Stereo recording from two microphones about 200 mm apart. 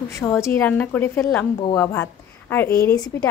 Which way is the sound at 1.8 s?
10° left (ahead or behind).